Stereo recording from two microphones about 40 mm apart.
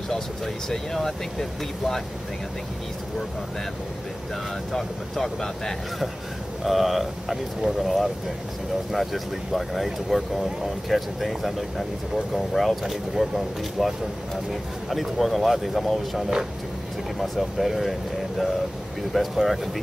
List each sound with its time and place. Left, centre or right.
0.7 s speech: centre
4.7 s speech: centre
6.6 s speech: centre
12.5 s speech: centre
19.1 s speech: centre